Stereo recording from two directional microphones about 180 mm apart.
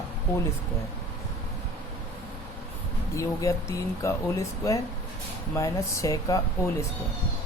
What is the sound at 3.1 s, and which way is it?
Speech, 15° left (ahead or behind).